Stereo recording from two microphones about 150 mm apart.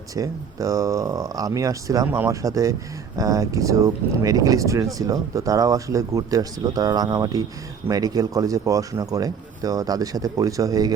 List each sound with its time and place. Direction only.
0.2 s speech: 20° right (ahead or behind)